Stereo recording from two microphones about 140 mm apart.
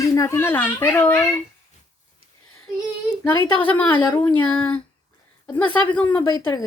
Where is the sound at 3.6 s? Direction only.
10° left (ahead or behind).